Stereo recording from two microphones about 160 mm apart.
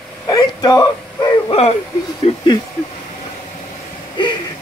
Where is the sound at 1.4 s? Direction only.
40° left (ahead or behind).